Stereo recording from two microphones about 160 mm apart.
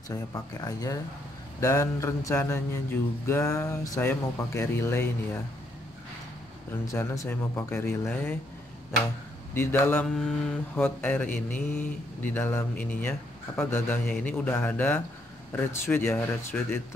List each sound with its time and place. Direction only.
0.1 s speech: 20° left (ahead or behind)
6.9 s speech: 15° left (ahead or behind)
9.5 s speech: 15° left (ahead or behind)